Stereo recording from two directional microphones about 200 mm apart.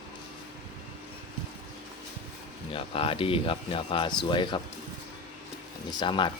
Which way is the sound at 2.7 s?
25° left (ahead or behind).